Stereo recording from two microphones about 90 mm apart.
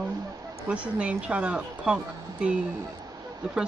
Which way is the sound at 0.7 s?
15° right (ahead or behind).